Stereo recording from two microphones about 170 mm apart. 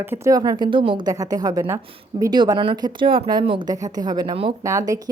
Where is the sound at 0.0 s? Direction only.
15° right (ahead or behind).